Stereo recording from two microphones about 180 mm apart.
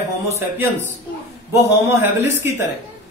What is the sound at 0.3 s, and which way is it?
Speech, 15° right (ahead or behind).